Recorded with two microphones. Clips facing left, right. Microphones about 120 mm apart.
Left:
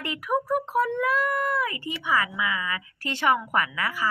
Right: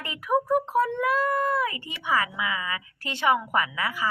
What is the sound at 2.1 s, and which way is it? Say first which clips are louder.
Speech: even; 30° right (ahead or behind).